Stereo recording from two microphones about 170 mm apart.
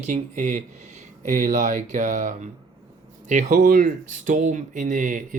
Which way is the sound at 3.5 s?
55° right (ahead or behind).